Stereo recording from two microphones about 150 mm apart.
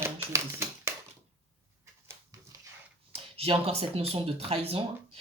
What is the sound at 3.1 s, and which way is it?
Speech, 40° right (ahead or behind).